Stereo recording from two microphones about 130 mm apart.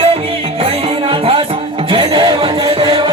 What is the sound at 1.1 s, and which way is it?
Music, 45° right (ahead or behind).